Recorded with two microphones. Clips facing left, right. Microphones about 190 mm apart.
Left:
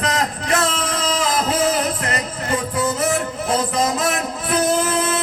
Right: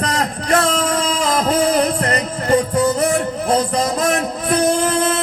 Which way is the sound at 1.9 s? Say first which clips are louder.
Right 5 dB; 45° right (ahead or behind).